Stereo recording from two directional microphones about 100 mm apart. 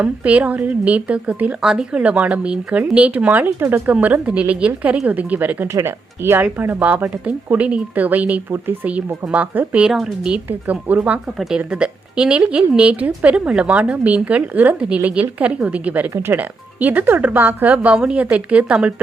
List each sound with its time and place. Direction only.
0.0 s speech: 15° right (ahead or behind)